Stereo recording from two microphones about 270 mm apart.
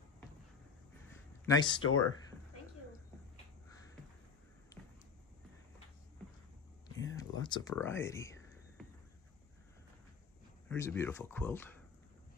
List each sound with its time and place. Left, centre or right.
1.4 s speech: centre
1.8 s speech: left
4.7 s basketball bounce: centre
7.1 s a sound: centre
7.7 s speech: centre
10.7 s speech: centre